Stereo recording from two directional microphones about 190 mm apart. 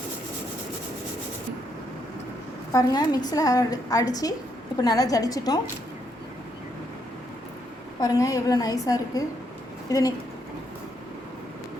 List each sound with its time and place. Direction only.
2.7 s a woman's voice: 20° left (ahead or behind)
8.0 s a woman's voice: 20° left (ahead or behind)